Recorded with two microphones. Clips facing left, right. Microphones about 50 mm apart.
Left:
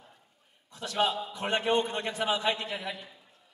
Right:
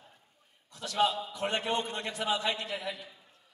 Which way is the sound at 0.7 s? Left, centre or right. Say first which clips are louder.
Even; left.